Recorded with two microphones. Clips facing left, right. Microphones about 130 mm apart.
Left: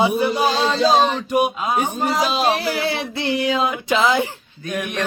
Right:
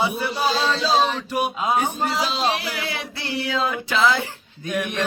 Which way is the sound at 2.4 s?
35° left (ahead or behind).